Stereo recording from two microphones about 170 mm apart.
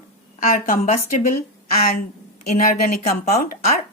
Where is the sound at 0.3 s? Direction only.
55° left (ahead or behind).